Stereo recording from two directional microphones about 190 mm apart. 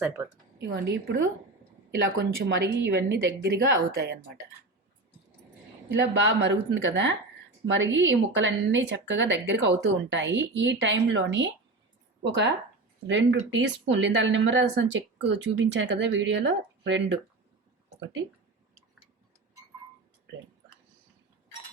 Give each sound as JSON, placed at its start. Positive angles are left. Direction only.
{"t": 0.2, "sound": "a woman's voice", "side_deg": -10}
{"t": 0.6, "sound": "a woman's voice", "side_deg": -60}
{"t": 6.2, "sound": "speech", "side_deg": -75}
{"t": 17.8, "sound": "a sound", "side_deg": -75}